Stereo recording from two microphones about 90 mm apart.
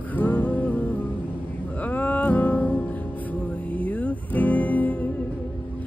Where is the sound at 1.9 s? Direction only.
15° left (ahead or behind).